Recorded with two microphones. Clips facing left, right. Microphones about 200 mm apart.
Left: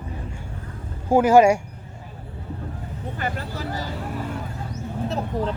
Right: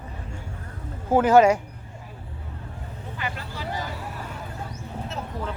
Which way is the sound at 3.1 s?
45° left (ahead or behind).